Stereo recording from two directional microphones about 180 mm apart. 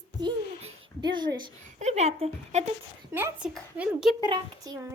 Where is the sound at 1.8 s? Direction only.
40° right (ahead or behind).